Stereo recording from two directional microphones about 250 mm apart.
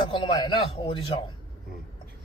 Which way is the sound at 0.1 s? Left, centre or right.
Centre.